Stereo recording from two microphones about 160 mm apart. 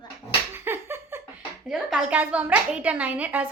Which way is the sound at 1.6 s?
5° right (ahead or behind).